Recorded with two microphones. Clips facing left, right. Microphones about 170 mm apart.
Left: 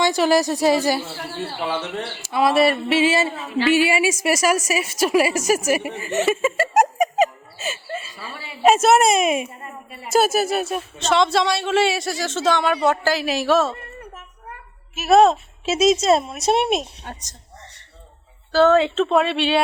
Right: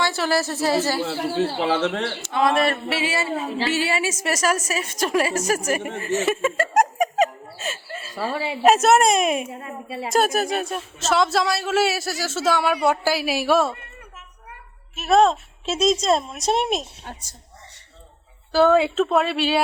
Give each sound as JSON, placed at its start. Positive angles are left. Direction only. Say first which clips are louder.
{"t": 0.0, "sound": "a woman's voice", "louder": "left 5 dB", "side_deg": 15}
{"t": 1.5, "sound": "a woman's voice", "louder": "right 4 dB", "side_deg": -90}
{"t": 2.2, "sound": "a woman's voice", "louder": "left 4 dB", "side_deg": 10}
{"t": 2.9, "sound": "a woman's voice", "louder": "left 6 dB", "side_deg": 20}
{"t": 6.2, "sound": "laughter", "louder": "left 2 dB", "side_deg": 0}
{"t": 8.3, "sound": "a woman's voice", "louder": "right 12 dB", "side_deg": -90}
{"t": 8.6, "sound": "a woman's voice", "louder": "left 1 dB", "side_deg": 0}
{"t": 9.5, "sound": "a woman's voice", "louder": "right 5 dB", "side_deg": -90}
{"t": 10.1, "sound": "a woman's voice", "louder": "left 3 dB", "side_deg": 5}
{"t": 14.9, "sound": "a woman's voice", "louder": "left 3 dB", "side_deg": 5}
{"t": 18.5, "sound": "a woman's voice", "louder": "left 1 dB", "side_deg": -10}